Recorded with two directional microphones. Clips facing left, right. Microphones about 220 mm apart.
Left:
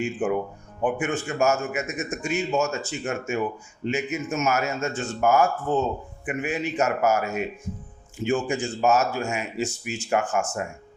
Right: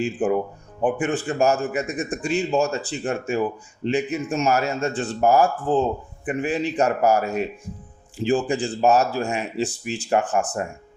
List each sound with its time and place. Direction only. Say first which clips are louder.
0.0 s a man's voice: right 3 dB; 35° right (ahead or behind)